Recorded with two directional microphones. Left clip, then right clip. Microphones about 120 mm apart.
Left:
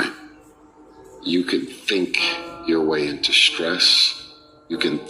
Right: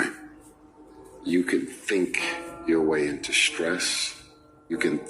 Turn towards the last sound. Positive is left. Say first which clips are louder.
# left 3 dB
turn(degrees=30)  # may be behind; listen again after turning